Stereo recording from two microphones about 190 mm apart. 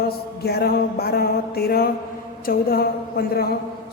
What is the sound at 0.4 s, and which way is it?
A woman's voice, 55° left (ahead or behind).